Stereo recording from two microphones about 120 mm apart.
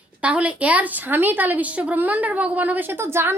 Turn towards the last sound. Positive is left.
turn(degrees=-20)  # may be behind; listen again after turning